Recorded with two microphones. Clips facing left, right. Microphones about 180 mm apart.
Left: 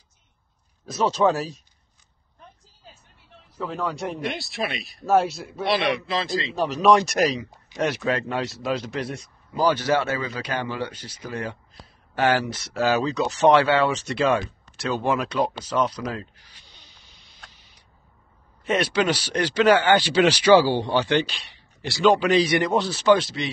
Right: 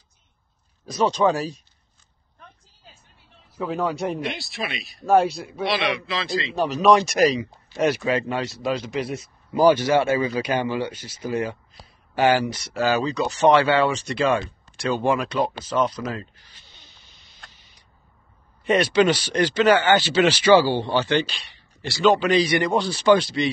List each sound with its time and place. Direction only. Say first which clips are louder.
0.8 s speech: right 1 dB; 5° left (ahead or behind)
3.5 s speech: right 4 dB; 5° right (ahead or behind)
5.7 s a man's voice: left 2 dB; 50° left (ahead or behind)
6.5 s speech: right 1 dB; centre (ahead or behind)
9.5 s speech: right 4 dB; 15° right (ahead or behind)
15.6 s speech: right 1 dB; 10° left (ahead or behind)
16.0 s speech: right 1 dB; 5° right (ahead or behind)
16.3 s speech: even; 10° left (ahead or behind)
16.7 s a sound: even; centre (ahead or behind)
18.6 s speech: right 4 dB; centre (ahead or behind)
21.0 s speech: even; centre (ahead or behind)